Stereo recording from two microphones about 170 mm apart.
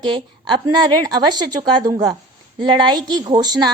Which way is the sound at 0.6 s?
25° right (ahead or behind).